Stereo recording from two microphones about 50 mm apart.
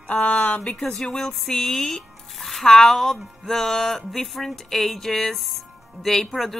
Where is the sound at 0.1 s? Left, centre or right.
Left.